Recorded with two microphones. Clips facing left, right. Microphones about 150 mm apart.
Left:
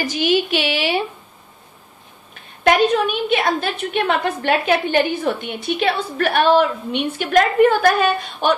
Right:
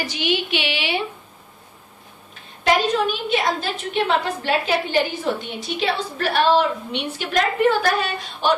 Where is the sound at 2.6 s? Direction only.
60° left (ahead or behind).